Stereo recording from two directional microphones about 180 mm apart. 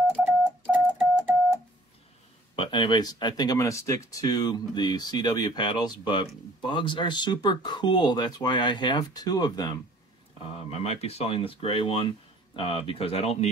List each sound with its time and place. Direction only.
0.7 s telephone dialing: 10° right (ahead or behind)
2.5 s speech: 25° left (ahead or behind)
10.5 s speech: 35° left (ahead or behind)